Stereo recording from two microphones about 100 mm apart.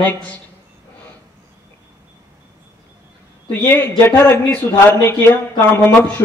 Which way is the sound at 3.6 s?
25° left (ahead or behind).